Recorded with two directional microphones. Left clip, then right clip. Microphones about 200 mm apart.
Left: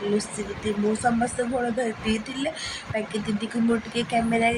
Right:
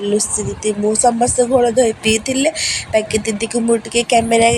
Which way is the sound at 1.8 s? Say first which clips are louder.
Right 13 dB; 40° right (ahead or behind).